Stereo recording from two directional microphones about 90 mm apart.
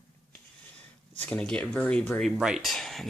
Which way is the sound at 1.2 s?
15° left (ahead or behind).